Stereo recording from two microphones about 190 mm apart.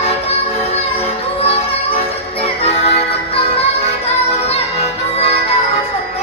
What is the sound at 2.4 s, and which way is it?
Music, 30° left (ahead or behind).